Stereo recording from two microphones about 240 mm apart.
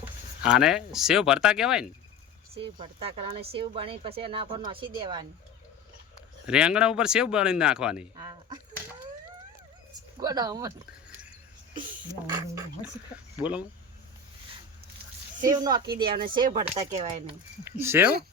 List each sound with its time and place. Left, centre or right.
0.0 s speech: centre
2.8 s a woman's voice: right
6.4 s speech: centre
10.2 s speech: centre
12.3 s speech: centre
15.4 s a woman's voice: centre
17.7 s speech: centre